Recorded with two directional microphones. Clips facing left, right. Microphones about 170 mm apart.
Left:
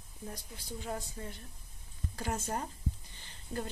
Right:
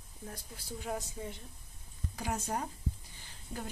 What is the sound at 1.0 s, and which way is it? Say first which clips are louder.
A woman's voice: right 2 dB; 20° right (ahead or behind).